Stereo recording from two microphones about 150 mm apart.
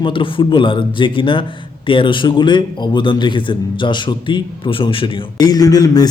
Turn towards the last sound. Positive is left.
turn(degrees=25)  # may be behind; listen again after turning